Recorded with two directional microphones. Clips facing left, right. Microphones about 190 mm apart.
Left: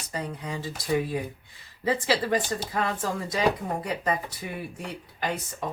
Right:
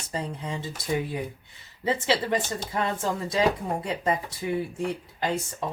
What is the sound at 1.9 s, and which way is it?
Speech, 25° right (ahead or behind).